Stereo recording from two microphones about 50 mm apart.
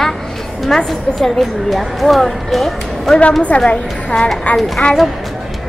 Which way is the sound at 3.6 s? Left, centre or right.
Left.